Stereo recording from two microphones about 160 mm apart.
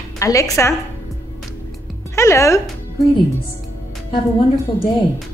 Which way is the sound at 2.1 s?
15° left (ahead or behind).